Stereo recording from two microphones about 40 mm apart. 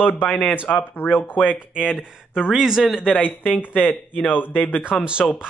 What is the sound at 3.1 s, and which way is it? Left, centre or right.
Speech, left.